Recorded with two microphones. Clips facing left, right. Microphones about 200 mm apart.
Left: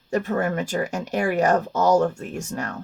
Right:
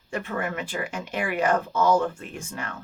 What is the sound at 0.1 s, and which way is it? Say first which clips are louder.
Speech: left 7 dB; 40° left (ahead or behind).